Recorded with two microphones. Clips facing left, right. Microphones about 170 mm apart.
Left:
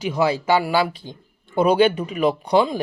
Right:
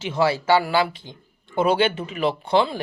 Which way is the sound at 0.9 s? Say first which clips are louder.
Left 4 dB; 20° right (ahead or behind).